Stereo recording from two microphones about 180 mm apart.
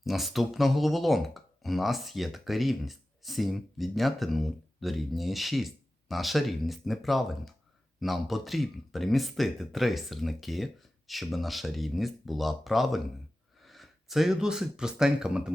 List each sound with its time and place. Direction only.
0.0 s speech: centre (ahead or behind)